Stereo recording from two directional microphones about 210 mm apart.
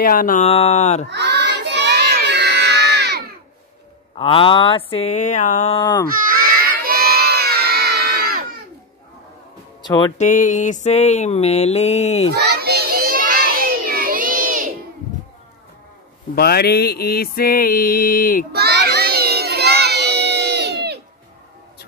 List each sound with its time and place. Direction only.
0.0 s mantra: 40° left (ahead or behind)
1.1 s crowd: 55° right (ahead or behind)
4.2 s a sound: 25° left (ahead or behind)
5.8 s a sound: 20° left (ahead or behind)
6.1 s crowd: 40° right (ahead or behind)
9.8 s speech: 20° left (ahead or behind)
10.1 s mantra: 35° left (ahead or behind)
12.3 s children playing: 50° right (ahead or behind)
16.3 s mantra: 50° left (ahead or behind)
18.5 s children shouting: 50° right (ahead or behind)